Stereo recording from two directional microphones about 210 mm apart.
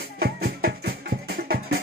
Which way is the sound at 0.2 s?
45° right (ahead or behind).